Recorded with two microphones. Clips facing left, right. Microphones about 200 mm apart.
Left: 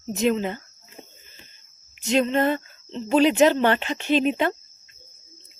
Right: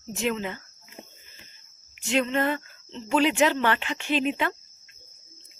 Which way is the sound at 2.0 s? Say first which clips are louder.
Left 4 dB; 40° left (ahead or behind).